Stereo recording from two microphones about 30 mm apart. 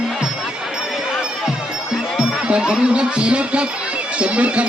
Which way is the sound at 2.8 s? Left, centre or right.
Right.